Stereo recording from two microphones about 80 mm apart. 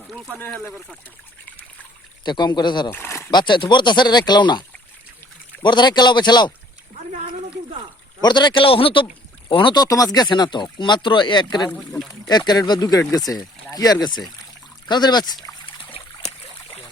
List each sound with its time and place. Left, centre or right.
0.1 s speech: centre
2.2 s speech: left
2.9 s a sound: left
3.3 s speech: left
5.6 s speech: left
8.2 s speech: left
9.8 s speech: left
10.2 s speech: left
11.8 s speech: centre
12.3 s speech: left
13.0 s speech: left